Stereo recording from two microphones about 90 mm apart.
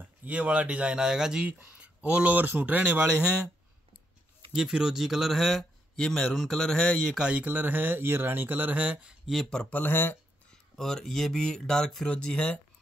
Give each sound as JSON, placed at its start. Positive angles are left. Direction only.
{"t": 0.0, "sound": "a man's voice", "side_deg": -15}
{"t": 4.5, "sound": "speech", "side_deg": -10}
{"t": 7.2, "sound": "speech", "side_deg": -15}
{"t": 9.2, "sound": "speech", "side_deg": 0}
{"t": 10.8, "sound": "speech", "side_deg": 5}